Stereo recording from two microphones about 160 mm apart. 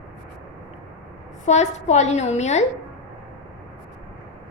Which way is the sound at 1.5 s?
45° left (ahead or behind).